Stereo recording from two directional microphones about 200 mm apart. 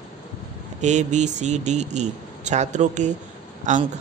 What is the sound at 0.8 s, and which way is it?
Speech, 35° right (ahead or behind).